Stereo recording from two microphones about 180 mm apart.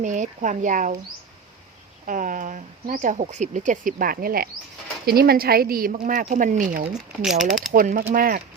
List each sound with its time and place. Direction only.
0.0 s speech: 45° right (ahead or behind)
2.0 s speech: 50° right (ahead or behind)
7.2 s speech: centre (ahead or behind)
7.7 s speech: 50° right (ahead or behind)